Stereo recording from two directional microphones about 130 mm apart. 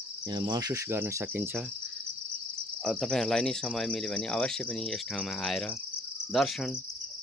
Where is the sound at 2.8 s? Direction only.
5° left (ahead or behind).